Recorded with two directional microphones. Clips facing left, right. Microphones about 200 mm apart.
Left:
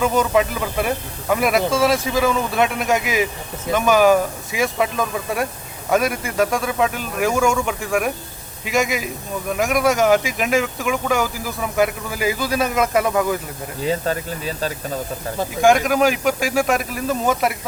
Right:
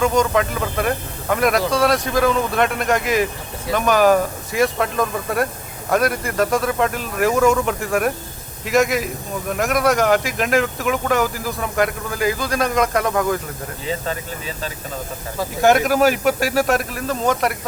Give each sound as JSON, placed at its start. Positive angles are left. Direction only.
{"t": 0.0, "sound": "speech", "side_deg": 5}
{"t": 13.8, "sound": "speech", "side_deg": 40}
{"t": 15.6, "sound": "speech", "side_deg": -5}